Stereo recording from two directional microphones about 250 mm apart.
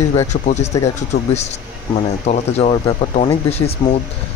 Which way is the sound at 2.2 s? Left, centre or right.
Left.